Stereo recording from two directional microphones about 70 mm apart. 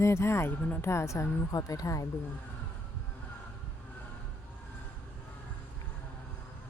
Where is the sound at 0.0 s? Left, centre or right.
Left.